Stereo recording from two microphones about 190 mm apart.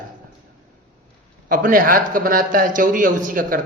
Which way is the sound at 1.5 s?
45° right (ahead or behind).